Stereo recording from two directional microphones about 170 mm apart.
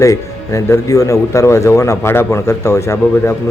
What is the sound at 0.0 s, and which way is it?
Speech, 20° left (ahead or behind).